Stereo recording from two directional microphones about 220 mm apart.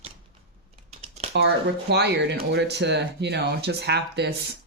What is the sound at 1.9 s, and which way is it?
Speech, 50° right (ahead or behind).